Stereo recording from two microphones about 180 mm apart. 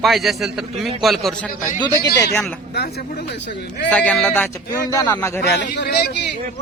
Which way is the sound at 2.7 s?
65° left (ahead or behind).